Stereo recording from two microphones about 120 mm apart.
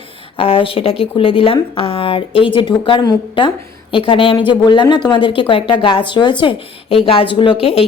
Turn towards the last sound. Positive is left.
turn(degrees=50)  # may be behind; listen again after turning